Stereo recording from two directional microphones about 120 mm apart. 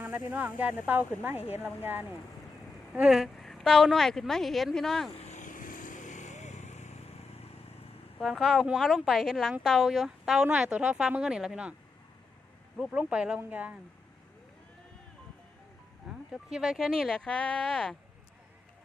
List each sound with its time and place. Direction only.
0.3 s speech: 15° right (ahead or behind); by 5.1 s 5° left (ahead or behind)
5.2 s vehicle: 85° left; by 7.5 s 55° left (ahead or behind)
8.2 s speech: centre (ahead or behind)
12.9 s speech: 10° right (ahead or behind)
16.0 s speech: 5° right (ahead or behind)